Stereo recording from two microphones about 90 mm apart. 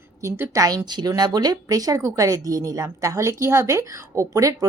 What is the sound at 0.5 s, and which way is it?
A woman's voice, 40° right (ahead or behind).